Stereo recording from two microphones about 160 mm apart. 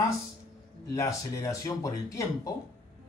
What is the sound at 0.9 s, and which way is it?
A man's voice, 20° left (ahead or behind).